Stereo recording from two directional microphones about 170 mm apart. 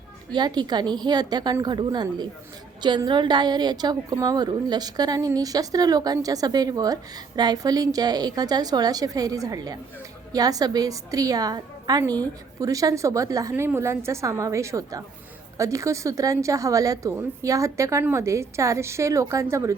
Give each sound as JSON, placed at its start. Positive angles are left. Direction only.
{"t": 0.3, "sound": "a woman's voice", "side_deg": -25}